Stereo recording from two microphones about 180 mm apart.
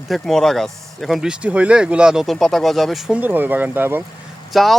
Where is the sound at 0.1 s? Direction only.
Centre (ahead or behind).